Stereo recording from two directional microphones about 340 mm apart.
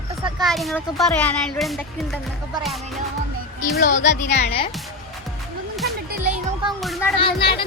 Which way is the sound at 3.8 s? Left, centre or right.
Left.